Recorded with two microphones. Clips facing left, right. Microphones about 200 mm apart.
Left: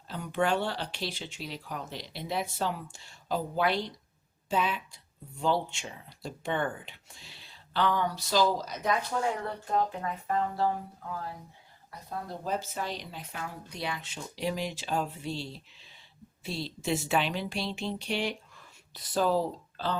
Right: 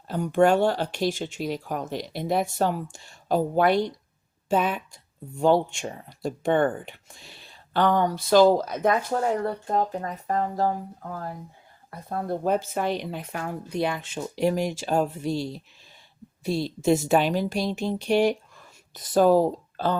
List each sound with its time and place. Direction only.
0.1 s speech: 45° right (ahead or behind)